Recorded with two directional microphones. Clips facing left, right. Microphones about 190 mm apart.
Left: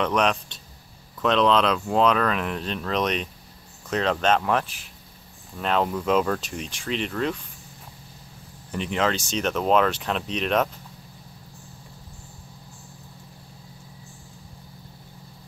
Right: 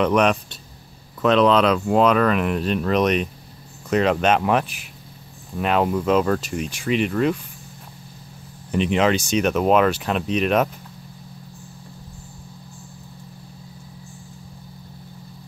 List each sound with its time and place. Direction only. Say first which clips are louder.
0.0 s speech: right 5 dB; 5° right (ahead or behind)
8.7 s speech: right 6 dB; 20° right (ahead or behind)